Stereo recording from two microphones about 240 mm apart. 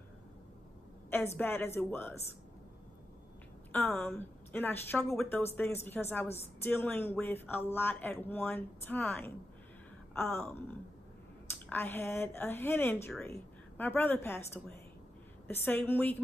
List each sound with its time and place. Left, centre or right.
1.1 s speech: centre
3.7 s speech: centre
11.7 s speech: centre